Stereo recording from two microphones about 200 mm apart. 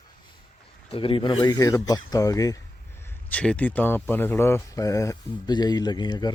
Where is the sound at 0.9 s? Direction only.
25° left (ahead or behind).